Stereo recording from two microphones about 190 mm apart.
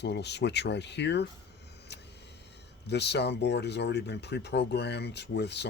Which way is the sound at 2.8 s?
60° left (ahead or behind).